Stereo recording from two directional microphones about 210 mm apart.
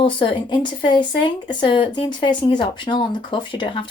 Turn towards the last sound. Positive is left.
turn(degrees=20)  # may be behind; listen again after turning